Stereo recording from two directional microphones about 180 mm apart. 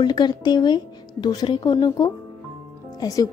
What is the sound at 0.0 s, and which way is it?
A woman's voice, 25° left (ahead or behind).